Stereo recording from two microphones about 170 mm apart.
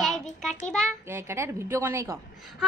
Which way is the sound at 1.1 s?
15° right (ahead or behind).